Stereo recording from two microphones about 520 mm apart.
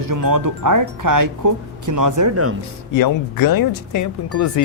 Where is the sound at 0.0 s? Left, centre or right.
Right.